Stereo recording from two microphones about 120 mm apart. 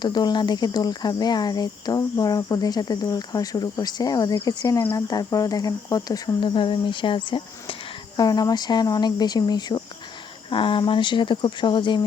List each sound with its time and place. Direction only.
0.0 s speech: 35° left (ahead or behind)